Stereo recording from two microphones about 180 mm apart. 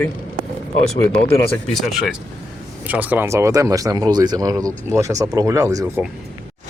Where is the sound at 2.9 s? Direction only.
10° right (ahead or behind).